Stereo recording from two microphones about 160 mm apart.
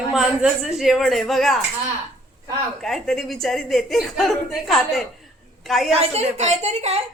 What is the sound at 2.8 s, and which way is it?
A woman's voice, centre (ahead or behind).